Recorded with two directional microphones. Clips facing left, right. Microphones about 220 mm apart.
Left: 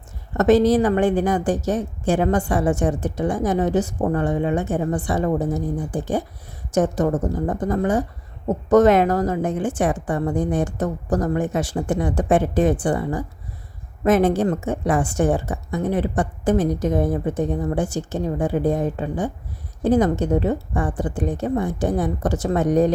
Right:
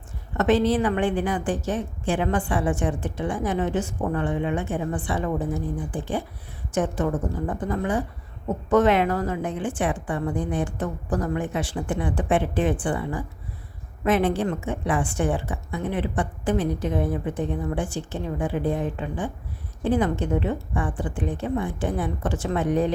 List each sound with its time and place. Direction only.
0.3 s a woman's voice: 40° left (ahead or behind)